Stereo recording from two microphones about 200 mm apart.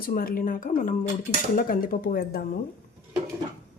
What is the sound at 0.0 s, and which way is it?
A woman's voice, 45° left (ahead or behind).